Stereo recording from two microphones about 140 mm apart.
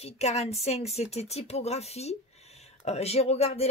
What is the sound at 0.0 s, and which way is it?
Speech, 50° left (ahead or behind).